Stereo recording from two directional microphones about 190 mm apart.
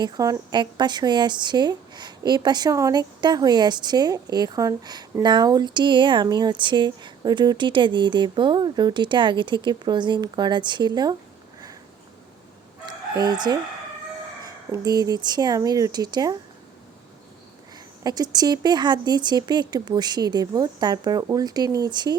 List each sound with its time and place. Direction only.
0.0 s a woman's voice: 20° right (ahead or behind)
13.1 s a woman's voice: 20° right (ahead or behind)
18.0 s a woman's voice: 20° right (ahead or behind)